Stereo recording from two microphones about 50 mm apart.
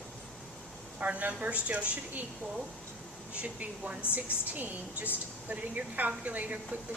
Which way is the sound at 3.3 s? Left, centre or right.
Right.